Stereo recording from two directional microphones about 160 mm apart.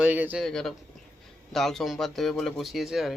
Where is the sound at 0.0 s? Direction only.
10° right (ahead or behind).